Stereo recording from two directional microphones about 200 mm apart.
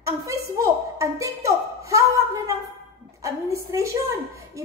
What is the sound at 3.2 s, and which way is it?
A woman's voice, 15° right (ahead or behind).